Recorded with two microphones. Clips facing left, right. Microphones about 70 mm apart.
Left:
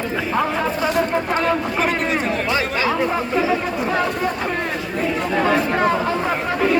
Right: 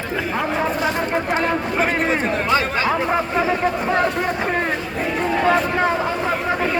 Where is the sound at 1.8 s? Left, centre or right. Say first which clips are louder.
Right 1 dB; right.